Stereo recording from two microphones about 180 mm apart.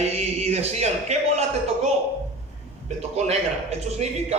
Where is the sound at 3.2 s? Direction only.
35° right (ahead or behind).